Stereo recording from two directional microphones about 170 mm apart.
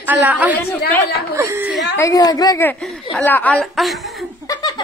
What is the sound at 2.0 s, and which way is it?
Speech, 20° left (ahead or behind).